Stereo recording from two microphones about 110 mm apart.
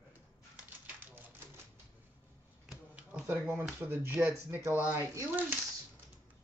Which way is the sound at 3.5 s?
20° right (ahead or behind).